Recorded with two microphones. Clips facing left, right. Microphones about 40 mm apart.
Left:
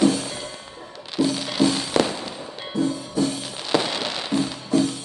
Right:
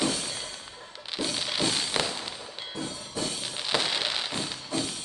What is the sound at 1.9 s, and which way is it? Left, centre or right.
Fireworks, centre.